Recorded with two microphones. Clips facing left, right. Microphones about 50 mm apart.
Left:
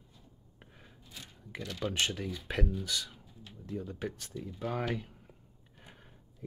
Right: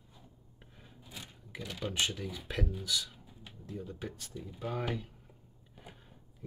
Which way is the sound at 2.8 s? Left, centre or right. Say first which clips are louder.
Right 1 dB; left.